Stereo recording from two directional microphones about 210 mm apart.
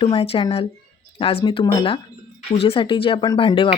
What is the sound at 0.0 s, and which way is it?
Speech, 25° left (ahead or behind).